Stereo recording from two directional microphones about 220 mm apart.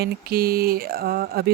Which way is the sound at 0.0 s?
45° right (ahead or behind).